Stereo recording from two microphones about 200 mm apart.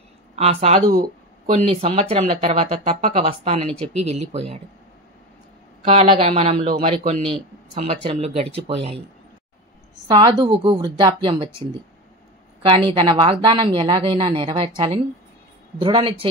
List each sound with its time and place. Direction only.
0.4 s a woman's voice: 30° right (ahead or behind)
5.9 s a woman's voice: 30° right (ahead or behind)
10.0 s a woman's voice: 20° right (ahead or behind)
12.6 s a woman's voice: 25° right (ahead or behind)
15.8 s a woman's voice: 25° right (ahead or behind)